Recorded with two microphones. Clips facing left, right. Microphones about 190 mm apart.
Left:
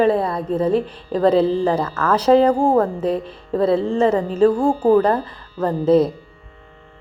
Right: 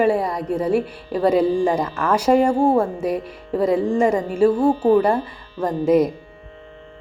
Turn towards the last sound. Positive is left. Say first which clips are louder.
# left 1 dB
turn(degrees=-15)  # may be behind; listen again after turning